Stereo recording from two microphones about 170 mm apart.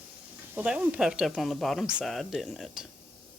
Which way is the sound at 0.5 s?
5° right (ahead or behind).